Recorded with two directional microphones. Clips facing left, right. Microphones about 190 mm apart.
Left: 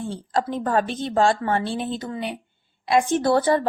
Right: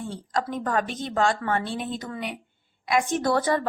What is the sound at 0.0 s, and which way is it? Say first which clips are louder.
A woman's voice: left 4 dB; 30° left (ahead or behind).